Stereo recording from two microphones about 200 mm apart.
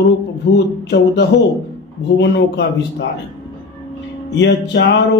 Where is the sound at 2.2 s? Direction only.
60° left (ahead or behind).